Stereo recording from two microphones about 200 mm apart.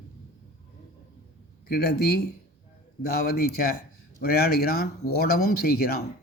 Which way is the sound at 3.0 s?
50° left (ahead or behind).